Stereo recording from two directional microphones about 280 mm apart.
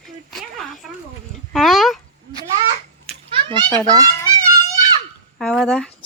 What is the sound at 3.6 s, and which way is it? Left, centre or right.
Speech, centre.